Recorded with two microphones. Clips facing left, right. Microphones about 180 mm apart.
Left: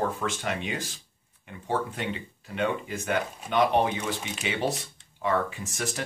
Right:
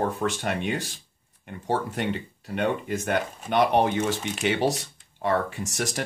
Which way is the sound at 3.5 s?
55° right (ahead or behind).